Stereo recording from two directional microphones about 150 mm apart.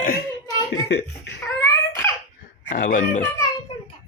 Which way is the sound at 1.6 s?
20° left (ahead or behind).